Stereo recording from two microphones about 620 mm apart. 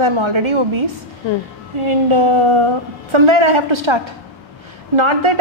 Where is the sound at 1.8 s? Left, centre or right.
Right.